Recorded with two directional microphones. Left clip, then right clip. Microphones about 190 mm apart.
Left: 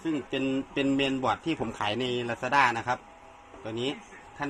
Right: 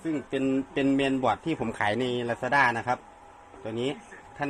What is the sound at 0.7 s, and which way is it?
A man's voice, 35° right (ahead or behind).